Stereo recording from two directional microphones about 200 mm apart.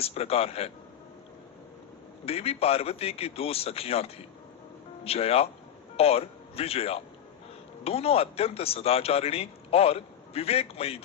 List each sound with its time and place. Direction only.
0.0 s speech: 30° left (ahead or behind)
2.2 s speech: 30° left (ahead or behind)